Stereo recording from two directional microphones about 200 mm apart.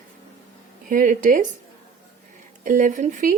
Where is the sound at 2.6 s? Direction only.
40° right (ahead or behind).